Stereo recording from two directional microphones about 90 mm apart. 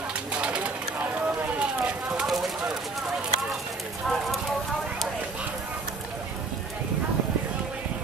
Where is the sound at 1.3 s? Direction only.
20° right (ahead or behind).